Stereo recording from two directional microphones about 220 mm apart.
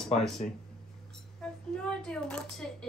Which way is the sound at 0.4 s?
35° left (ahead or behind).